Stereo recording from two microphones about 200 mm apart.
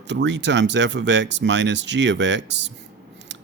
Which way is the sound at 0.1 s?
60° right (ahead or behind).